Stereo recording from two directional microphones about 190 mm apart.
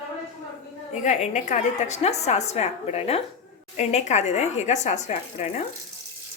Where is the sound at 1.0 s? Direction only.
40° left (ahead or behind).